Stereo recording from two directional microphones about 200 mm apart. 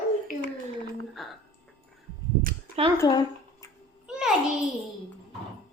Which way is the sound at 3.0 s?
20° left (ahead or behind).